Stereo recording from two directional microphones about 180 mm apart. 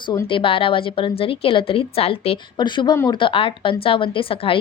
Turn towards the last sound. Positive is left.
turn(degrees=30)  # may be behind; listen again after turning